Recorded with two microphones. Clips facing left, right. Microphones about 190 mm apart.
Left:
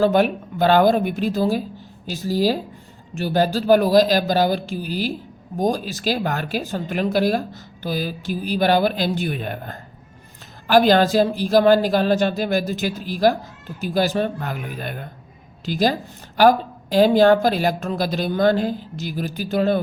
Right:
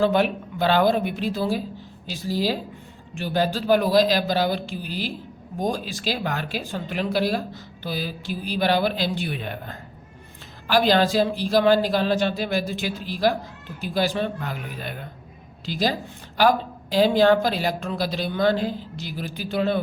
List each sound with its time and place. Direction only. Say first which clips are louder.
0.0 s speech: left 3 dB; 45° left (ahead or behind)